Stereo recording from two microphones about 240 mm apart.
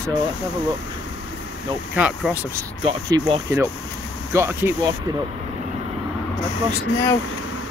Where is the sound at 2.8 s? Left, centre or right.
Centre.